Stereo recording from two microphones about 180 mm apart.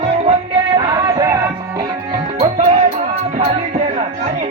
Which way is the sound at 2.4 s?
35° right (ahead or behind).